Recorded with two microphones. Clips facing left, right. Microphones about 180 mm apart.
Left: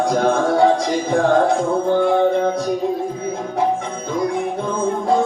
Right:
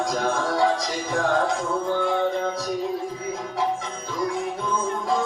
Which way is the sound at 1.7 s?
55° left (ahead or behind).